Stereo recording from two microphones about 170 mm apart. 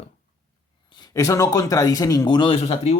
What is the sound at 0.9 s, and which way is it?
A man's voice, 25° left (ahead or behind).